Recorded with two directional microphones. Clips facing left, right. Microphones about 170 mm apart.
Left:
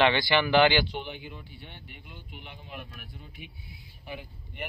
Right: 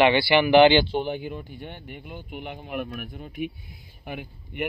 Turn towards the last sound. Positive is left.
turn(degrees=-60)  # may be behind; listen again after turning